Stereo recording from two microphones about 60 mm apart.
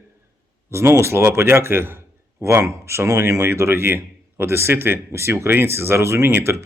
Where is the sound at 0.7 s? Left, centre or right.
Right.